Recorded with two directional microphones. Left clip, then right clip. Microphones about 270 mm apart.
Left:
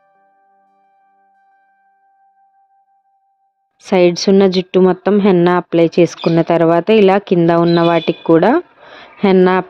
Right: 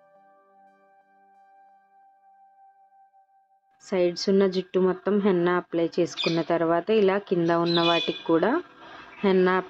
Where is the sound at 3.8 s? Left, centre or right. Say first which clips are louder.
Left 13 dB; left.